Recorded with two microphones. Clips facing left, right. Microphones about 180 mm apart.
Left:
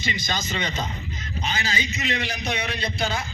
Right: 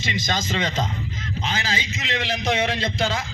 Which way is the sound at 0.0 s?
90° right.